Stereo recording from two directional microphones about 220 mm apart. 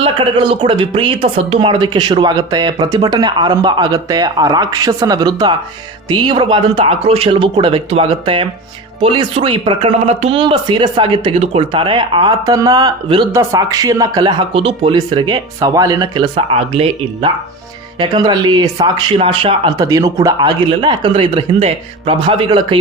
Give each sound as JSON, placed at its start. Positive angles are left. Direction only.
{"t": 0.0, "sound": "speech", "side_deg": -25}